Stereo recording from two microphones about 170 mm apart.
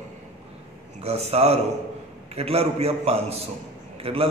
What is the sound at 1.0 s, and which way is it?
A man's voice, 40° right (ahead or behind).